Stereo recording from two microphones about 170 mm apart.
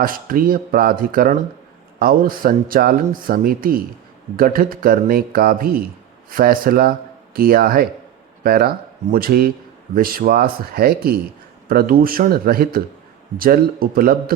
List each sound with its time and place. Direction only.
0.0 s a man's voice: 55° right (ahead or behind)